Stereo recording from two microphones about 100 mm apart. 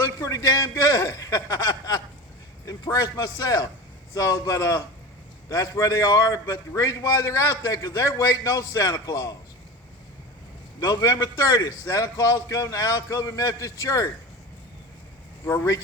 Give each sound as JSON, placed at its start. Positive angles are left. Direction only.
{"t": 0.0, "sound": "a man's voice", "side_deg": 35}
{"t": 10.8, "sound": "a man's voice", "side_deg": 40}